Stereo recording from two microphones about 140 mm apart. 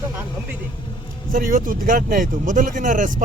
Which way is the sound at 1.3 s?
85° right.